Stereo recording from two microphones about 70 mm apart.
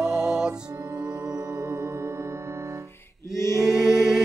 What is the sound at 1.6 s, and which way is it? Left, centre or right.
Music, right.